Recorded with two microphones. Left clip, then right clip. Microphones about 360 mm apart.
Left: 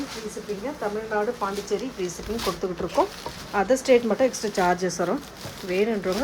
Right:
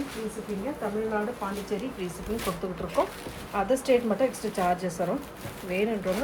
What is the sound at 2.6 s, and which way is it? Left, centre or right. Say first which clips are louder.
A woman's voice: left 4 dB; centre.